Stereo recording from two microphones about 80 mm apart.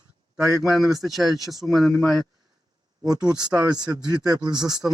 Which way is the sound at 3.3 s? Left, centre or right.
Right.